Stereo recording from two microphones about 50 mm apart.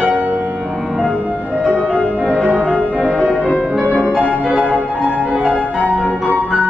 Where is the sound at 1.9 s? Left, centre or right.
Left.